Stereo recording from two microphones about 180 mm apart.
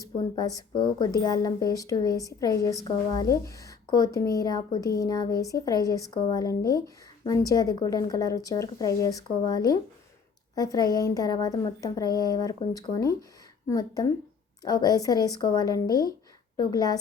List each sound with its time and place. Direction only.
0.0 s speech: 20° left (ahead or behind)